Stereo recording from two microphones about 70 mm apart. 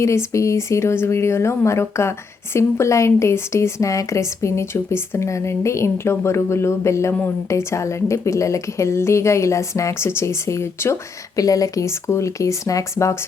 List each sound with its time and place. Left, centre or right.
0.0 s a woman's voice: left
11.3 s a woman's voice: left